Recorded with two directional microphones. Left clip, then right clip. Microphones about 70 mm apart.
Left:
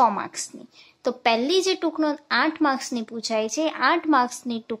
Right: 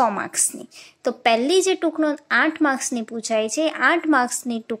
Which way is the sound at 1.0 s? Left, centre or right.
Right.